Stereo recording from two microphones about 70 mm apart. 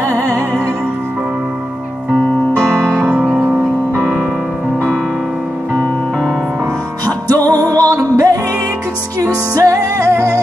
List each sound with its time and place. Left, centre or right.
3.0 s music: right
7.1 s music: right